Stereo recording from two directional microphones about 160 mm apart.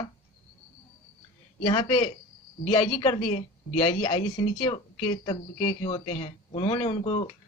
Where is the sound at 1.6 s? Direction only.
25° left (ahead or behind).